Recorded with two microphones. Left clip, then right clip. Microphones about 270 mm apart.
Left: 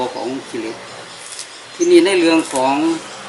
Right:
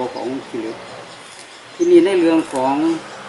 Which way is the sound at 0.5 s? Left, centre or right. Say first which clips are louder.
Left 1 dB; centre.